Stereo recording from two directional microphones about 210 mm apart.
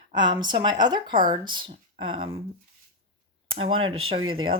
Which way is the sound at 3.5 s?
25° right (ahead or behind).